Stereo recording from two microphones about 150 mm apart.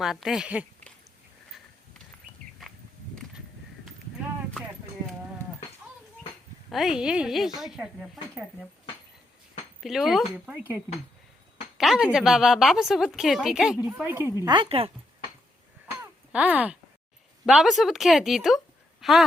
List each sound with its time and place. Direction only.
0.0 s a woman's voice: centre (ahead or behind)
6.7 s a woman's voice: centre (ahead or behind)
9.8 s a woman's voice: centre (ahead or behind)
10.3 s speech: 10° right (ahead or behind)
11.8 s a woman's voice: centre (ahead or behind)
14.4 s speech: 35° right (ahead or behind)
16.3 s a woman's voice: 10° right (ahead or behind)